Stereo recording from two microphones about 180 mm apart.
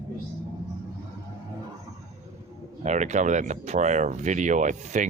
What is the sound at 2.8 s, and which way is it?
Speech, 40° right (ahead or behind).